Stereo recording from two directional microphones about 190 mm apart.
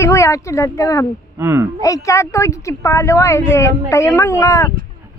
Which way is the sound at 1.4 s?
15° right (ahead or behind).